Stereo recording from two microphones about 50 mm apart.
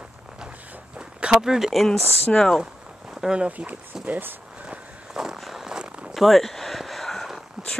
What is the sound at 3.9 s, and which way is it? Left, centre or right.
Speech, centre.